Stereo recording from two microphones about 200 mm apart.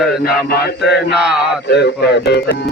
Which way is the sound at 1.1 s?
5° right (ahead or behind).